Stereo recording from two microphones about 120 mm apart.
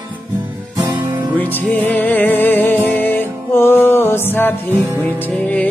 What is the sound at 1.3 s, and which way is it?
Music, 15° left (ahead or behind).